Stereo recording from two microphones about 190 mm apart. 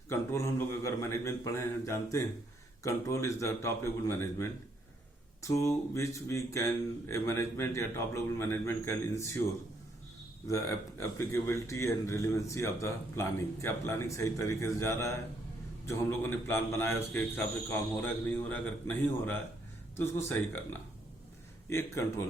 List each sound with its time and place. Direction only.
0.1 s speech: 15° left (ahead or behind)
10.4 s speech: 15° left (ahead or behind)
21.7 s speech: 15° left (ahead or behind)